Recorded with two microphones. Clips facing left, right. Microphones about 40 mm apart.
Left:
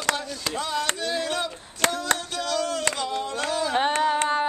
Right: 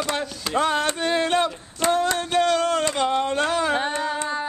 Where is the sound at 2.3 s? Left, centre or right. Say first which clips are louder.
Right 7 dB; right.